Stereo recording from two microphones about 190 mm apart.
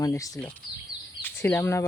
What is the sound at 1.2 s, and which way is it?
Speech, 10° left (ahead or behind).